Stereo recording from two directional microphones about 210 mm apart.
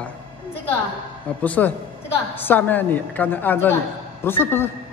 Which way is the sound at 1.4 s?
10° left (ahead or behind).